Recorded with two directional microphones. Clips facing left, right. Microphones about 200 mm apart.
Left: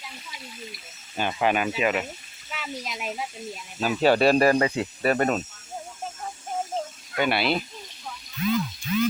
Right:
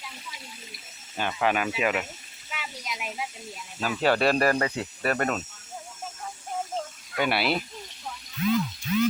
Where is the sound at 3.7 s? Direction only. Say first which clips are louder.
Left 4 dB; 20° left (ahead or behind).